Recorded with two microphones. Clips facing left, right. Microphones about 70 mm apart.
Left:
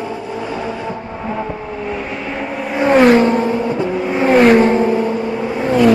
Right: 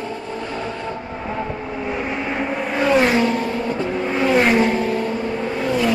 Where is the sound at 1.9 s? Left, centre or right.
Centre.